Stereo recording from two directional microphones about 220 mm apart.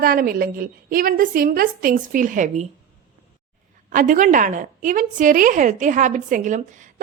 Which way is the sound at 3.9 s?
35° right (ahead or behind).